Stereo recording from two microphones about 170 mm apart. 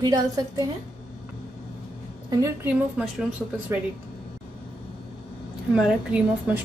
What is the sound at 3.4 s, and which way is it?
Speech, 5° left (ahead or behind).